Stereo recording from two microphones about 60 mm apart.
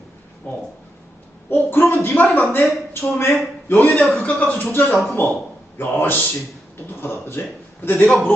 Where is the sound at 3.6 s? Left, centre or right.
Left.